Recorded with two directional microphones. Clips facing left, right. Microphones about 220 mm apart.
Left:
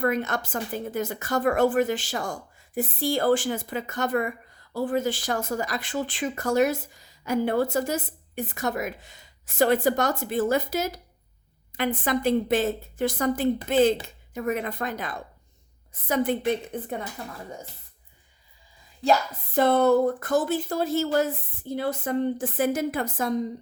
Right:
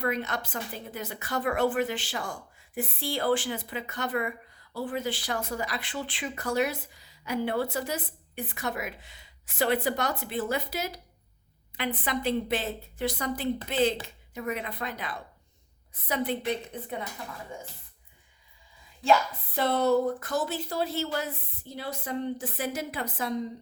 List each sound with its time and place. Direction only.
0.0 s a woman's voice: 50° left (ahead or behind)
19.5 s a woman's voice: 50° left (ahead or behind)